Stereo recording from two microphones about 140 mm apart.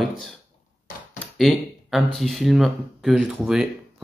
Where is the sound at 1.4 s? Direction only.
Centre (ahead or behind).